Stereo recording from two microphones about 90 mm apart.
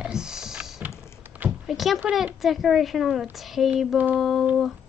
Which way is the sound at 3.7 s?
15° right (ahead or behind).